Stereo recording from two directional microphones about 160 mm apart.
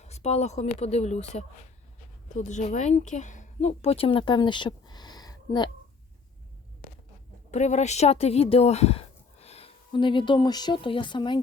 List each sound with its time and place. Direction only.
0.0 s speech: 45° left (ahead or behind); by 5.7 s 25° left (ahead or behind)
7.5 s speech: 45° left (ahead or behind); by 11.3 s 30° left (ahead or behind)